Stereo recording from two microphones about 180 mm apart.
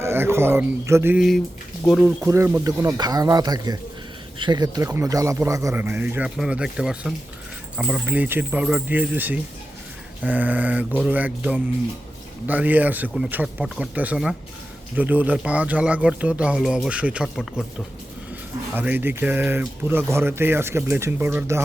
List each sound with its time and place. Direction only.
0.0 s speech: 15° right (ahead or behind)
1.9 s speech: 5° right (ahead or behind)
2.2 s speech: 15° right (ahead or behind)